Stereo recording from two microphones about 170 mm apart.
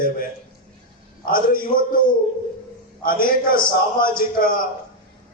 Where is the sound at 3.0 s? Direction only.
55° left (ahead or behind).